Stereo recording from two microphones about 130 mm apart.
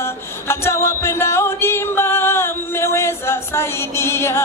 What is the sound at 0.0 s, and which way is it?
Music, 20° left (ahead or behind).